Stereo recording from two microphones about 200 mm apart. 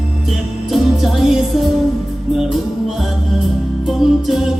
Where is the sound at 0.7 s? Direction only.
Centre (ahead or behind).